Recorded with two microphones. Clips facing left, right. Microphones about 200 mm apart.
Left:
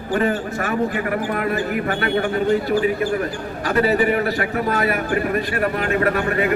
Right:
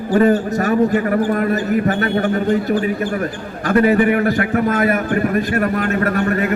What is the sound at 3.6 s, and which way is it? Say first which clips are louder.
A man's voice: right 4 dB; 50° right (ahead or behind).